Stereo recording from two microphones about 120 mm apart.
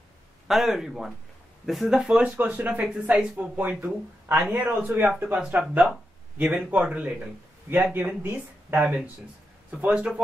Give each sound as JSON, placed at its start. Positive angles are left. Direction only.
{"t": 0.5, "sound": "speech", "side_deg": 0}